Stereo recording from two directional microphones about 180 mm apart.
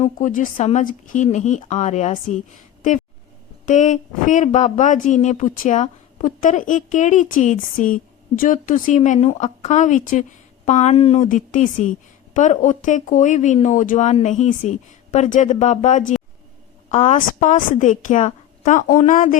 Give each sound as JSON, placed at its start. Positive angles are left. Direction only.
{"t": 0.0, "sound": "speech", "side_deg": 45}
{"t": 3.7, "sound": "speech", "side_deg": 45}